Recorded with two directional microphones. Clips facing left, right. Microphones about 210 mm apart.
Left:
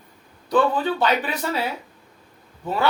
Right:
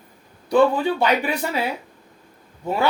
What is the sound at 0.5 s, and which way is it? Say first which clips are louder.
Speech: right 3 dB; 10° right (ahead or behind).